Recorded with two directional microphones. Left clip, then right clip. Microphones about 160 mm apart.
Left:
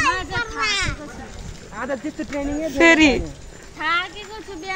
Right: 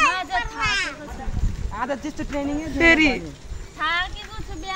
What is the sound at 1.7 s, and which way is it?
Speech, 35° right (ahead or behind).